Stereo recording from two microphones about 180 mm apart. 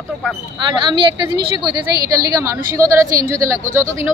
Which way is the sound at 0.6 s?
25° right (ahead or behind).